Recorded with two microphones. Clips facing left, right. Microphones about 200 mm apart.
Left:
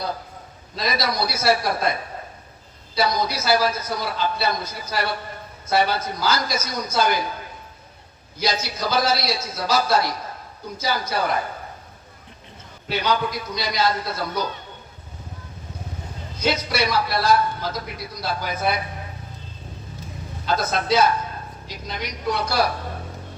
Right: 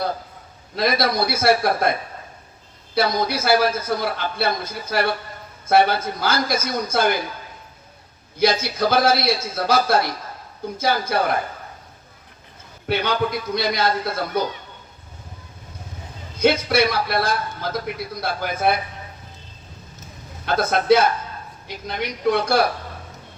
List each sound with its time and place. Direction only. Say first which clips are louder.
0.8 s a man's voice: right 4 dB; 55° right (ahead or behind)
8.4 s a man's voice: right 6 dB; 55° right (ahead or behind)
12.9 s a man's voice: right 2 dB; 55° right (ahead or behind)
16.4 s a man's voice: right 5 dB; 55° right (ahead or behind)
20.4 s a man's voice: right 3 dB; 55° right (ahead or behind)